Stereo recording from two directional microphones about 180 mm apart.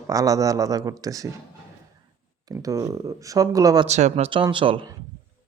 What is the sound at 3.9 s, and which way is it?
Speech, 40° right (ahead or behind).